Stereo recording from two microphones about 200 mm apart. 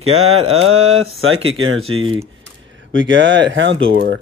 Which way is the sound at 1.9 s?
30° right (ahead or behind).